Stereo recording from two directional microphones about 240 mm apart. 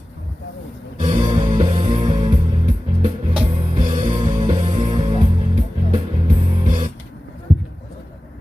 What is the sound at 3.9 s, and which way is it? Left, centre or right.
Music, centre.